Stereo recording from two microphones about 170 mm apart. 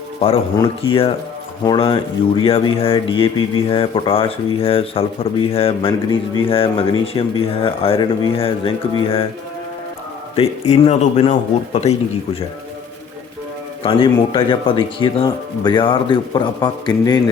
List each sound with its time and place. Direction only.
0.2 s speech: 35° left (ahead or behind)
10.3 s speech: 40° left (ahead or behind)
13.8 s a man's voice: 30° left (ahead or behind)